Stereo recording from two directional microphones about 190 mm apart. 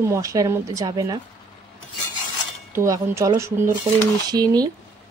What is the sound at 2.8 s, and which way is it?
Speech, 15° right (ahead or behind).